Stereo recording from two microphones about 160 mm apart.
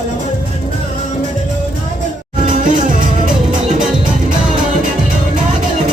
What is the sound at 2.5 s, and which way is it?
Music, 55° right (ahead or behind).